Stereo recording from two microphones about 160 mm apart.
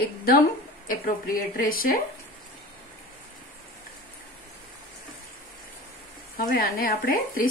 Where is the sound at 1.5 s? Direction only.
60° left (ahead or behind).